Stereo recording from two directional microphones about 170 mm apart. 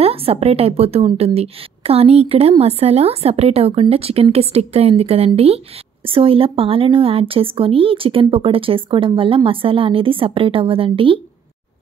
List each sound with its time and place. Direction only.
0.0 s speech: 35° right (ahead or behind)